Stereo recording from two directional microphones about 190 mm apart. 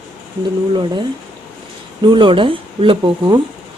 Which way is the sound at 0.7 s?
25° right (ahead or behind).